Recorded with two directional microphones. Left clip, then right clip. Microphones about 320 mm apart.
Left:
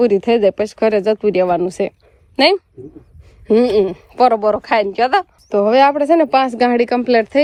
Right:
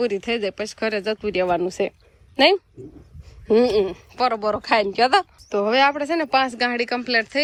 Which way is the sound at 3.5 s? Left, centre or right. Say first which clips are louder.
Left 4 dB; centre.